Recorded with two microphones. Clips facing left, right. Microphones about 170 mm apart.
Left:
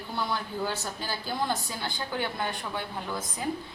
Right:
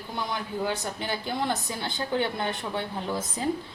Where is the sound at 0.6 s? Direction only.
15° right (ahead or behind).